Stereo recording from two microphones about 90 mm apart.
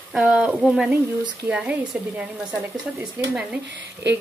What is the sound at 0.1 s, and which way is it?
Speech, 10° right (ahead or behind).